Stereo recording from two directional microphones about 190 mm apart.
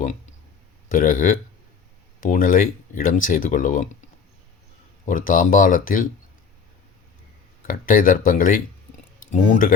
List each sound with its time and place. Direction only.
0.9 s speech: 45° left (ahead or behind)
5.0 s speech: 45° left (ahead or behind)
7.7 s speech: 45° left (ahead or behind)